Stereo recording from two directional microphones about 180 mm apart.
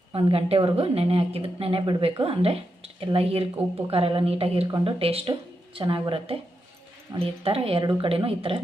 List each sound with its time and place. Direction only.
0.1 s a woman's voice: 30° right (ahead or behind)